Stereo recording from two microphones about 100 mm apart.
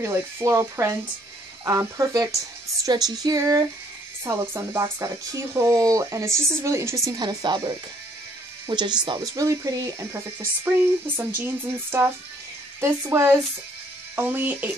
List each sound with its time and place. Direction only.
0.0 s speech: 25° right (ahead or behind)
4.3 s speech: 30° right (ahead or behind)
7.1 s speech: 45° right (ahead or behind)
9.3 s speech: 30° right (ahead or behind)